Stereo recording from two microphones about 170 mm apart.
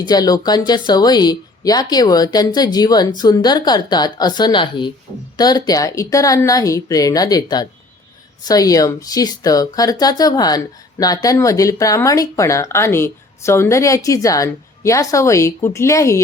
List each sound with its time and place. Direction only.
0.1 s speech: 25° left (ahead or behind)